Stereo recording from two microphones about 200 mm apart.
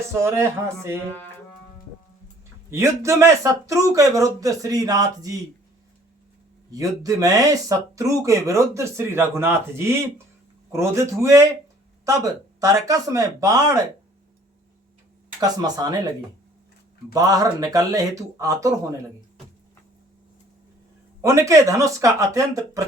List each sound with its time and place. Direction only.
0.2 s speech: 15° right (ahead or behind)
2.6 s speech: 15° right (ahead or behind)
6.7 s speech: 15° right (ahead or behind)
12.5 s speech: 15° right (ahead or behind)
15.4 s speech: 20° right (ahead or behind)
21.2 s speech: 15° right (ahead or behind)